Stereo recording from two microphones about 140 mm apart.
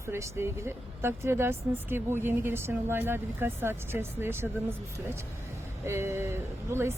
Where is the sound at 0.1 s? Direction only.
20° right (ahead or behind).